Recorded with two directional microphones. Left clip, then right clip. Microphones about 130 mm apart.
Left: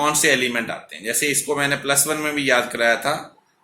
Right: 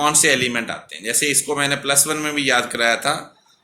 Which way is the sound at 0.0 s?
25° right (ahead or behind).